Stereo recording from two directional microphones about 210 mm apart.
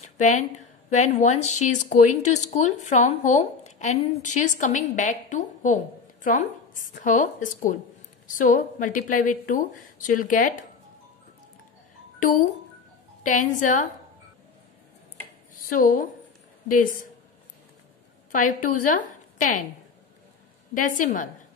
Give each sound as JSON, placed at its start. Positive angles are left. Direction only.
{"t": 0.2, "sound": "a woman's voice", "side_deg": 35}
{"t": 12.2, "sound": "a woman's voice", "side_deg": 40}
{"t": 15.7, "sound": "a woman's voice", "side_deg": 40}
{"t": 18.3, "sound": "a woman's voice", "side_deg": 40}
{"t": 20.7, "sound": "a woman's voice", "side_deg": 40}